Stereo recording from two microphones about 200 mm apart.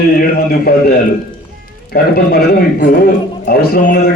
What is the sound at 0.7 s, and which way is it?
Speech, 50° left (ahead or behind).